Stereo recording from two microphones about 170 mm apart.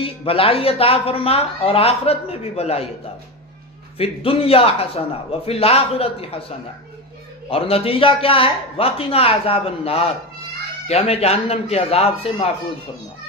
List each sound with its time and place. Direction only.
0.0 s a man's voice: 35° left (ahead or behind)
4.0 s a man's voice: 35° left (ahead or behind)
7.4 s a man's voice: 35° left (ahead or behind)